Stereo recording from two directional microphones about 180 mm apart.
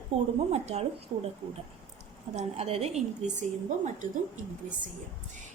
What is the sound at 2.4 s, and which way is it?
A woman's voice, 35° right (ahead or behind).